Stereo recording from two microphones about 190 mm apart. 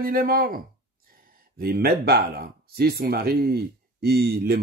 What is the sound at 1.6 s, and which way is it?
Speech, 55° right (ahead or behind).